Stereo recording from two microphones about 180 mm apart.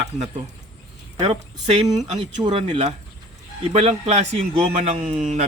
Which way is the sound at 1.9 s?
35° right (ahead or behind).